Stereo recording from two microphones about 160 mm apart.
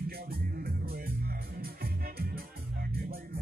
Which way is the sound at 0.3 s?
70° right (ahead or behind).